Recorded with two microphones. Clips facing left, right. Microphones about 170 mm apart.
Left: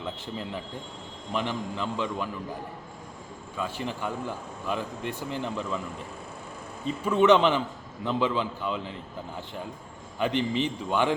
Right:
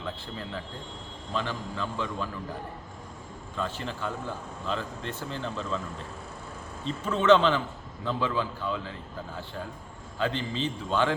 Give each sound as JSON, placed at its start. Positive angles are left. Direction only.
{"t": 0.0, "sound": "speech", "side_deg": 15}
{"t": 3.6, "sound": "a man's voice", "side_deg": 15}